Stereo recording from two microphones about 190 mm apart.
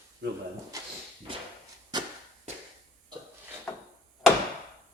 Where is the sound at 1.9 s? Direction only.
20° right (ahead or behind).